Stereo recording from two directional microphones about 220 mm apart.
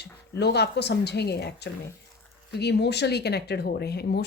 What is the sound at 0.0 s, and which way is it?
A woman's voice, 50° left (ahead or behind).